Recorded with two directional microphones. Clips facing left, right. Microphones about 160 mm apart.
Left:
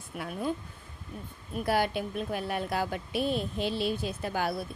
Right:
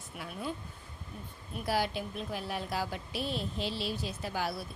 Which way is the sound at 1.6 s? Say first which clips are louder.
Left 4 dB; 55° left (ahead or behind).